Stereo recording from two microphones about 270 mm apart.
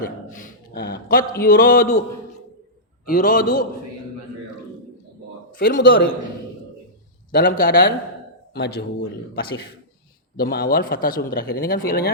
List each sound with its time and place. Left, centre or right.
0.0 s a man's voice: left
3.1 s speech: left
5.5 s speech: left
7.3 s speech: left
10.3 s speech: left